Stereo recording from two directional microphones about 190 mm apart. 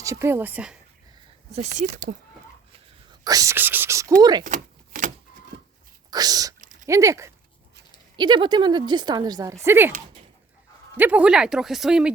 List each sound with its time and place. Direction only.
0.0 s speech: 15° right (ahead or behind)
1.5 s speech: 40° right (ahead or behind)
3.2 s a woman's voice: 15° right (ahead or behind)
4.4 s a sound: 40° right (ahead or behind)
6.1 s speech: 20° right (ahead or behind)
6.6 s a sound: 40° right (ahead or behind)
6.8 s a woman's voice: 15° right (ahead or behind)
10.9 s speech: 10° right (ahead or behind)